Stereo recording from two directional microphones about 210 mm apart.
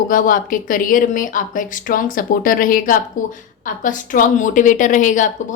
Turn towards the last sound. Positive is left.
turn(degrees=35)  # may be behind; listen again after turning